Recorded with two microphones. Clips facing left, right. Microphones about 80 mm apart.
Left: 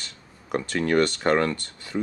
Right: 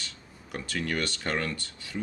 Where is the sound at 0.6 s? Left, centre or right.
Left.